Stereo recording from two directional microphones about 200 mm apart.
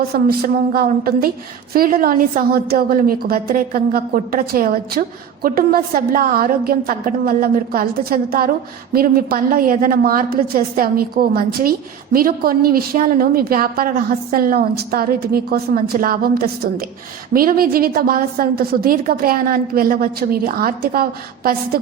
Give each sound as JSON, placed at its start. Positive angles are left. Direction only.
{"t": 0.1, "sound": "a woman's voice", "side_deg": -50}